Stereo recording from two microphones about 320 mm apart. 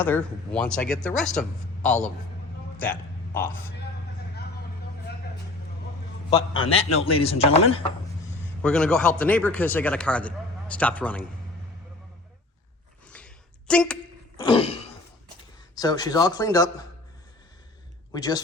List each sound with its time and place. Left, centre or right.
0.0 s speech: centre
2.7 s a sound: centre
6.3 s speech: centre
8.6 s speech: centre
13.1 s a sound: centre
14.4 s throat clearing: centre
15.7 s speech: centre
18.1 s speech: centre